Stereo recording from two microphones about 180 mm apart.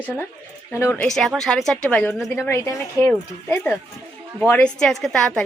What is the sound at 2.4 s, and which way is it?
Speech, 15° left (ahead or behind).